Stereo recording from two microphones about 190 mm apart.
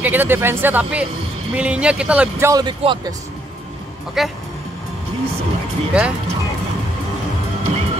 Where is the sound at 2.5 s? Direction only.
20° right (ahead or behind).